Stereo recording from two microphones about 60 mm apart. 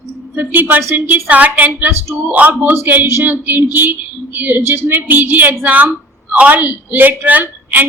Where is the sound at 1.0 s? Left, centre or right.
Right.